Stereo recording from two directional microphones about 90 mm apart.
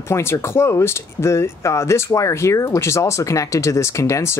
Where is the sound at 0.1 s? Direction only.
30° left (ahead or behind).